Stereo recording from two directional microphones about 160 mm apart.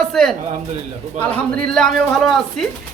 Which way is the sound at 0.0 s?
Centre (ahead or behind).